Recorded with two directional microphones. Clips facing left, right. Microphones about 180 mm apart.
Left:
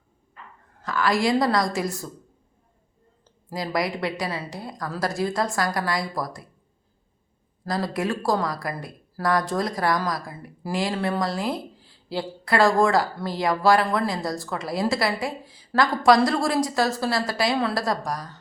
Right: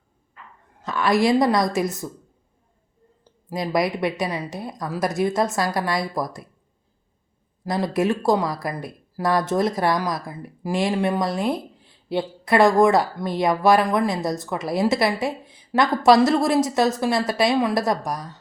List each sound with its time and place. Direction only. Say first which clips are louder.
0.8 s a woman's voice: right 3 dB; 25° right (ahead or behind)
3.5 s a woman's voice: right 4 dB; 20° right (ahead or behind)
7.6 s a woman's voice: right 4 dB; 20° right (ahead or behind)